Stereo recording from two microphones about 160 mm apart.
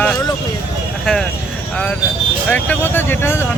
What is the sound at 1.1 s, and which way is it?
Speech, 5° left (ahead or behind).